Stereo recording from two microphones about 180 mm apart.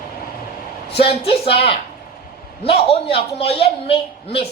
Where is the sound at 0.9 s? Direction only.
30° left (ahead or behind).